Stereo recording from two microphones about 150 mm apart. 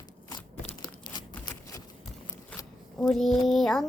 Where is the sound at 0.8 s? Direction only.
30° left (ahead or behind).